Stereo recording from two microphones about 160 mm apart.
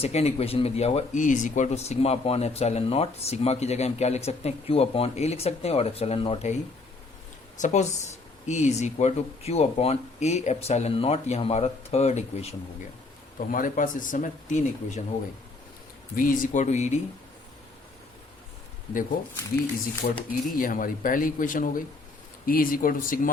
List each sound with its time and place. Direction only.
0.0 s speech: 40° left (ahead or behind)
13.5 s speech: 60° left (ahead or behind)
16.1 s speech: 60° left (ahead or behind)
20.0 s speech: 60° left (ahead or behind)